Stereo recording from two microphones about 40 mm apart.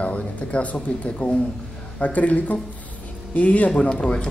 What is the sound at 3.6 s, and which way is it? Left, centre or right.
Speech, left.